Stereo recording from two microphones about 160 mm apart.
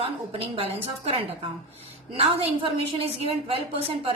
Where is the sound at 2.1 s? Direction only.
35° right (ahead or behind).